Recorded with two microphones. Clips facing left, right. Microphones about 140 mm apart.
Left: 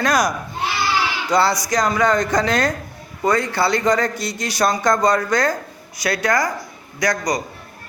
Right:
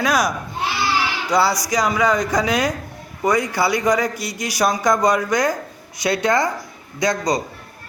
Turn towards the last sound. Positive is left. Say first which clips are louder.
# right 1 dB
turn(degrees=-25)  # may be behind; listen again after turning